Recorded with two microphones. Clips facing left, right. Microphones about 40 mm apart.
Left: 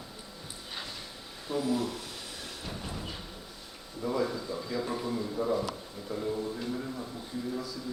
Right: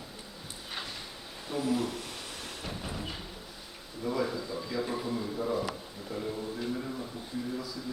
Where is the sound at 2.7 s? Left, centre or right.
Centre.